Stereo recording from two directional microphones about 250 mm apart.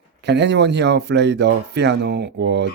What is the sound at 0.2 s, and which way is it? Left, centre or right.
Speech, right.